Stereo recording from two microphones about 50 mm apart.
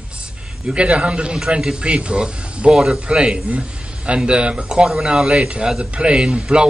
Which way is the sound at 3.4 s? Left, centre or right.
Right.